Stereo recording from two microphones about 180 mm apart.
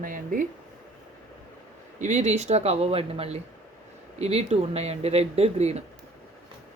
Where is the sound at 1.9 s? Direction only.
40° right (ahead or behind).